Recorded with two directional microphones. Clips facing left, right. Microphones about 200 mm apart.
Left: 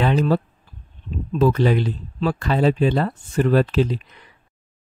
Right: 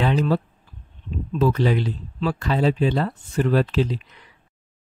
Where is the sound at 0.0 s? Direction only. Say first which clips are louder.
Left 2 dB; 50° left (ahead or behind).